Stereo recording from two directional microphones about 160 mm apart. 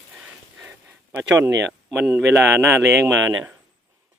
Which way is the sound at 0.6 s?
10° right (ahead or behind).